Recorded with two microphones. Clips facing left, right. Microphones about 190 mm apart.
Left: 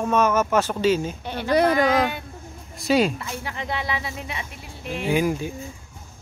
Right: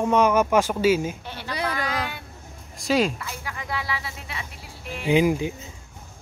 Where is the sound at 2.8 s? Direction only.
Centre (ahead or behind).